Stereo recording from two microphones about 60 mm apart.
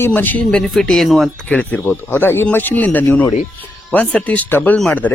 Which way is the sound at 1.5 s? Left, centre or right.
Left.